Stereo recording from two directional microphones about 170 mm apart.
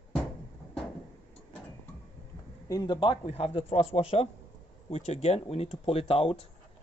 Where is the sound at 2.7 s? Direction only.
25° left (ahead or behind).